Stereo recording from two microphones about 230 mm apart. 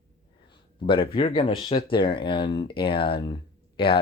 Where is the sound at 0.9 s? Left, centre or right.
Left.